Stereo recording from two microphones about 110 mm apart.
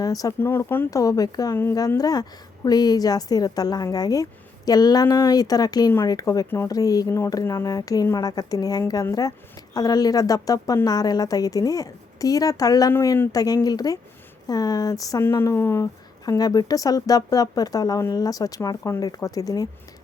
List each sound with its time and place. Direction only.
0.0 s speech: 35° left (ahead or behind)
0.3 s speech: 20° left (ahead or behind)
0.9 s speech: 30° left (ahead or behind)
12.9 s speech: 25° left (ahead or behind)